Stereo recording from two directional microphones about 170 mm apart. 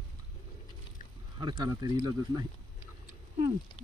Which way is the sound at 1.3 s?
25° right (ahead or behind).